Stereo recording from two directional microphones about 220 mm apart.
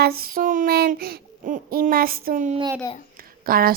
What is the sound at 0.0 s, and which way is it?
Child singing, 45° right (ahead or behind).